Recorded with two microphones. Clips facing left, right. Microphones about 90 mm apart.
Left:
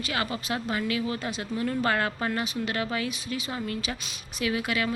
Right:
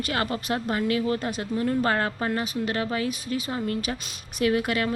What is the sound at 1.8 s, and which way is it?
Speech, 30° right (ahead or behind).